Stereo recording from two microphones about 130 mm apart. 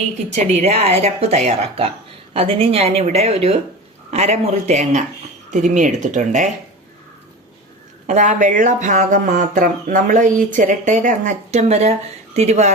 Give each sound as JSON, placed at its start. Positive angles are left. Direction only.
{"t": 0.3, "sound": "speech", "side_deg": -55}
{"t": 5.5, "sound": "speech", "side_deg": -70}
{"t": 8.0, "sound": "speech", "side_deg": -65}